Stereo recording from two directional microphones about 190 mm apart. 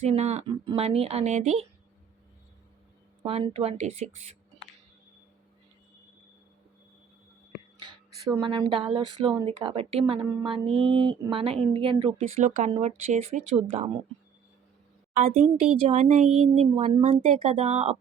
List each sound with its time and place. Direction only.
0.0 s speech: 35° right (ahead or behind)
3.2 s speech: 30° right (ahead or behind)
7.8 s speech: 25° right (ahead or behind)
15.1 s speech: 40° right (ahead or behind)